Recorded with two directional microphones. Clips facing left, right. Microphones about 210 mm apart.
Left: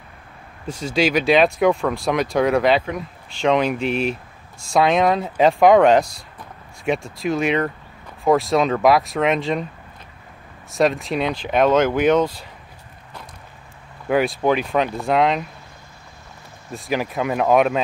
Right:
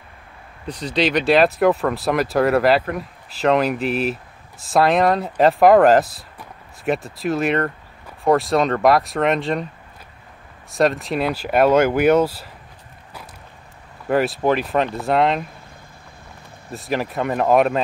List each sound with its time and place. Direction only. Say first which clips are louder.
0.7 s speech: even; 45° left (ahead or behind)
0.9 s speech: even; centre (ahead or behind)
10.7 s speech: even; centre (ahead or behind)
14.0 s speech: even; centre (ahead or behind)
16.7 s speech: even; centre (ahead or behind)